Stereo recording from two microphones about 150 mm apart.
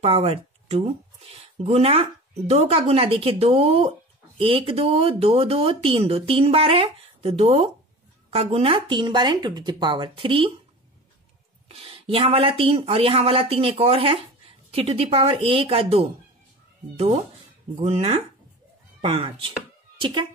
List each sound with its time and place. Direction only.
0.0 s speech: 40° right (ahead or behind)
11.7 s speech: 40° right (ahead or behind)